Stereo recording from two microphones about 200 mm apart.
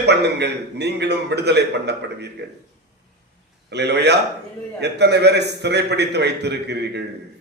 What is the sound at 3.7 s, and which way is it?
A man's voice, 55° right (ahead or behind).